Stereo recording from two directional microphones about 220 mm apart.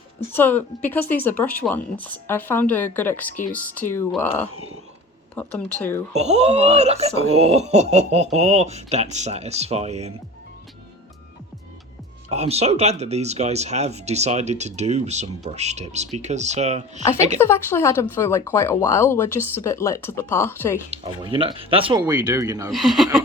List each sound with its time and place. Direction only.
0.3 s speech: 10° left (ahead or behind)
6.1 s speech: 30° right (ahead or behind)
12.3 s speech: 30° right (ahead or behind)
17.3 s speech: 10° left (ahead or behind)
20.9 s speech: 25° right (ahead or behind)
22.7 s speech: centre (ahead or behind)